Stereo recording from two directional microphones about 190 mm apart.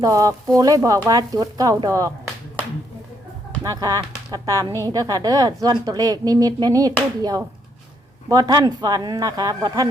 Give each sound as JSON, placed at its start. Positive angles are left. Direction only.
{"t": 0.0, "sound": "a woman's voice", "side_deg": -20}
{"t": 3.6, "sound": "a woman's voice", "side_deg": -20}